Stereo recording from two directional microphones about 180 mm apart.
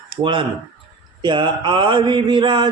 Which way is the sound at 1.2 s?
25° right (ahead or behind).